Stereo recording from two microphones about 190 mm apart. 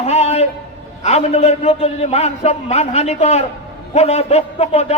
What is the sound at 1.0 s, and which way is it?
A man's voice, 35° left (ahead or behind).